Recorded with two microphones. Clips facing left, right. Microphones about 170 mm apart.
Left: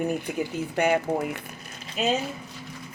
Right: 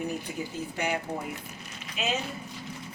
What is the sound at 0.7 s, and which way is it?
Speech, 60° left (ahead or behind).